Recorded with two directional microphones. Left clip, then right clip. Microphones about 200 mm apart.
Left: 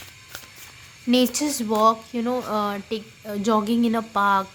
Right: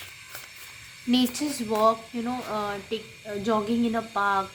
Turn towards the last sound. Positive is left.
turn(degrees=50)  # may be behind; listen again after turning